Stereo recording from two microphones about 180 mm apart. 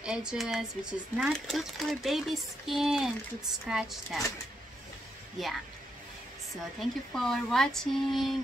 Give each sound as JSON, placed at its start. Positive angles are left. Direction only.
{"t": 0.0, "sound": "speech", "side_deg": -5}
{"t": 5.4, "sound": "speech", "side_deg": 0}
{"t": 7.2, "sound": "speech", "side_deg": 0}